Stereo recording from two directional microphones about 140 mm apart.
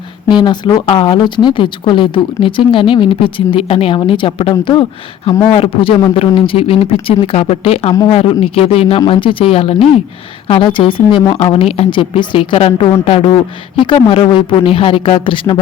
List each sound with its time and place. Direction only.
0.3 s speech: 30° left (ahead or behind)